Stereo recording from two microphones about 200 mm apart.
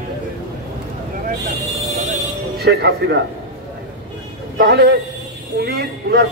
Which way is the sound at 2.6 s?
55° right (ahead or behind).